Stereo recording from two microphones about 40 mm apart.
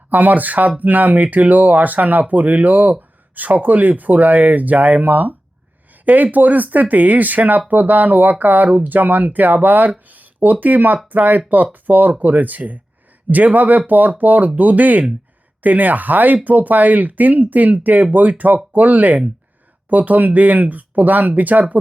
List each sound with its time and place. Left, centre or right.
0.1 s speech: right